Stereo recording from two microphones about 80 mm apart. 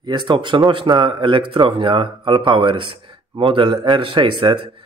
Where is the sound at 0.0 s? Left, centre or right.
Right.